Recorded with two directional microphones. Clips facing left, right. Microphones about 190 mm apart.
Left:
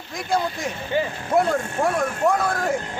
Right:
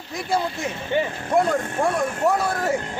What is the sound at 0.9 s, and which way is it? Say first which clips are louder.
Speech: right 1 dB; 20° right (ahead or behind).